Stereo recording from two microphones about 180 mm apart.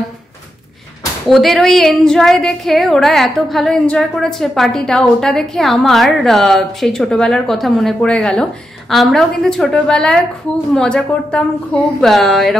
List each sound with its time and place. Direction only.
1.2 s a woman's voice: centre (ahead or behind)